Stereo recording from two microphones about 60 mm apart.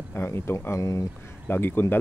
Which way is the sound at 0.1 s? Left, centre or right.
Left.